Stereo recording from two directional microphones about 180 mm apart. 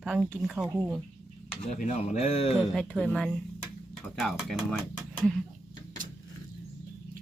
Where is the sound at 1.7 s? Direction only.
45° left (ahead or behind).